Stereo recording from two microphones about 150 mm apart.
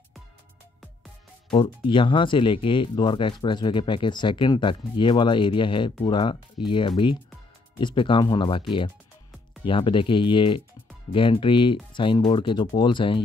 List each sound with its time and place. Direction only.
1.5 s speech: 35° left (ahead or behind)